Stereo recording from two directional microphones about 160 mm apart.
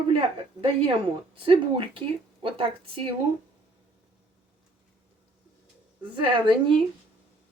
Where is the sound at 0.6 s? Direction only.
35° right (ahead or behind).